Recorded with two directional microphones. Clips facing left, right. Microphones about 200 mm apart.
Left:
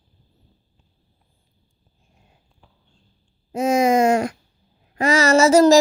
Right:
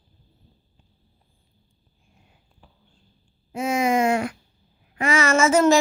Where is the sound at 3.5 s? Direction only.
40° left (ahead or behind).